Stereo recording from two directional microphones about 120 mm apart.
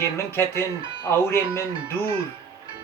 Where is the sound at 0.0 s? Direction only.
20° left (ahead or behind).